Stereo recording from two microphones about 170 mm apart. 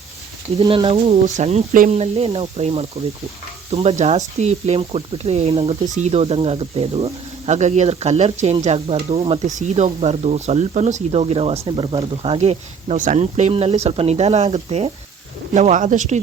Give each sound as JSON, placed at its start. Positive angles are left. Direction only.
{"t": 0.6, "sound": "speech", "side_deg": -30}